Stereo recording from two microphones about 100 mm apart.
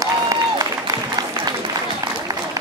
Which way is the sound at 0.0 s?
35° right (ahead or behind).